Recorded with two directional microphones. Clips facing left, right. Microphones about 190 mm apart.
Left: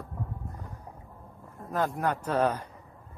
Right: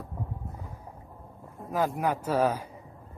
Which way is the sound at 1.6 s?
5° right (ahead or behind).